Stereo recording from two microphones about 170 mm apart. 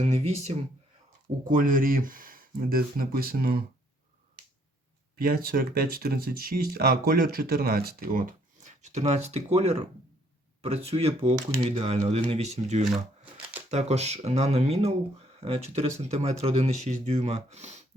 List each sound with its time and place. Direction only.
0.0 s speech: 40° right (ahead or behind)
1.5 s speech: 50° right (ahead or behind)
5.1 s speech: 60° right (ahead or behind); by 17.8 s 40° right (ahead or behind)